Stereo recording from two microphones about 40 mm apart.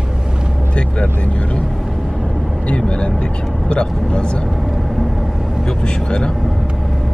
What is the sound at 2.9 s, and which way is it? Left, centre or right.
Speech, left.